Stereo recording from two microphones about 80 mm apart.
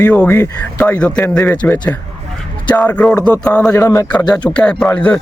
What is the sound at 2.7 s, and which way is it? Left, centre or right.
A man's voice, centre.